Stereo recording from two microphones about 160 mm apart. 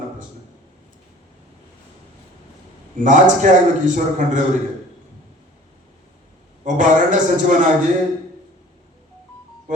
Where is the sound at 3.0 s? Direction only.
55° right (ahead or behind).